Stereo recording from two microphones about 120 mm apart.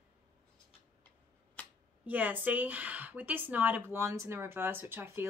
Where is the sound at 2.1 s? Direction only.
15° right (ahead or behind).